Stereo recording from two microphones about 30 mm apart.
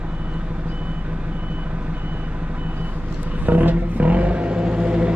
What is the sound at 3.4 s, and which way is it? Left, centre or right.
Vehicle, right.